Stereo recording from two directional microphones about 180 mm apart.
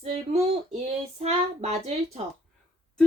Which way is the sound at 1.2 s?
35° right (ahead or behind).